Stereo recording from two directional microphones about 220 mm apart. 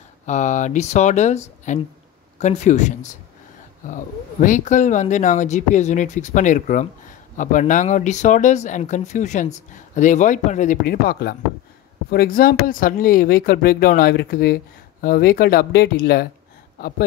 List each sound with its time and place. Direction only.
0.3 s speech: 35° left (ahead or behind)